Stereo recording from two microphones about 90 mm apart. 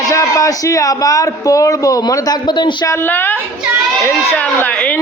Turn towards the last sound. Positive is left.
turn(degrees=15)  # may be behind; listen again after turning